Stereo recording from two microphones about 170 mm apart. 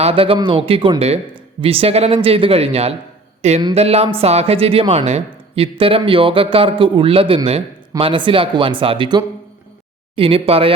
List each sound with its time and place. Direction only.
0.0 s speech: 35° right (ahead or behind)